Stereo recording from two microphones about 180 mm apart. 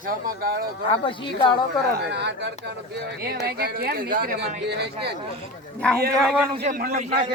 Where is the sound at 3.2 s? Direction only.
55° right (ahead or behind).